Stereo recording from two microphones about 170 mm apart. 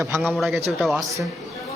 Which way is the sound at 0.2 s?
Centre (ahead or behind).